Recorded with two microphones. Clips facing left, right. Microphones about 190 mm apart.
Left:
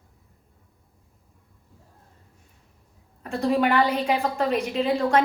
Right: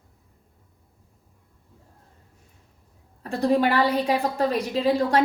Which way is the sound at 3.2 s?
35° right (ahead or behind).